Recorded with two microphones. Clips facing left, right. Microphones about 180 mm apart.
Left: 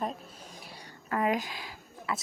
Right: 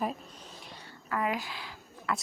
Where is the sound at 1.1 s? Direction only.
30° left (ahead or behind).